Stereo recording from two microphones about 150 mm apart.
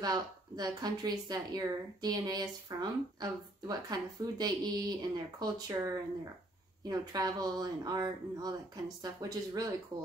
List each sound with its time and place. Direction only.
0.0 s speech: 25° right (ahead or behind)